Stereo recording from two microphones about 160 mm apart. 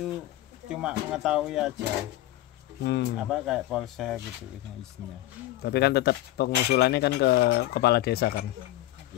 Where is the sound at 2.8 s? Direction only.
90° left.